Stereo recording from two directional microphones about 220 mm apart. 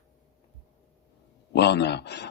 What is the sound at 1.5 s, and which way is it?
Speech, 50° left (ahead or behind).